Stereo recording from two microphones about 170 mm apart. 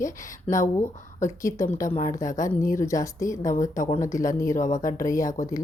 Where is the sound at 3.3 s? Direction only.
45° left (ahead or behind).